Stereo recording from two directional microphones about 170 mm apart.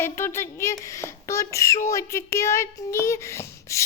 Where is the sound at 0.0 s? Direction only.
15° left (ahead or behind).